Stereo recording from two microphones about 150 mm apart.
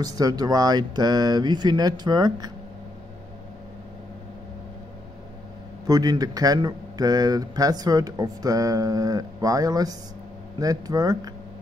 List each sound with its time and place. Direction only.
0.0 s speech: 25° right (ahead or behind)
5.9 s speech: 25° right (ahead or behind)